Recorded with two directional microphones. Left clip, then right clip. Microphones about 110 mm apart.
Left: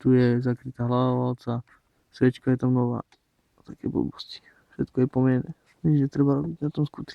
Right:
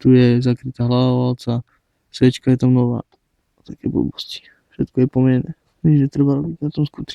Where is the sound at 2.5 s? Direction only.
30° right (ahead or behind).